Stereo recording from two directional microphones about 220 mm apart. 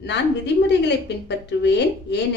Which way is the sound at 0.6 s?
50° left (ahead or behind).